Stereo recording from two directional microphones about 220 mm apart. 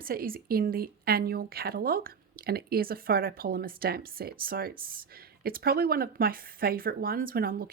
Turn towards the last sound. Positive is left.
turn(degrees=-40)  # may be behind; listen again after turning